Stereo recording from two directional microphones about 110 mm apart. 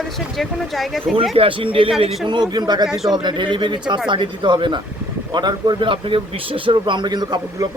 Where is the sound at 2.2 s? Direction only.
45° right (ahead or behind).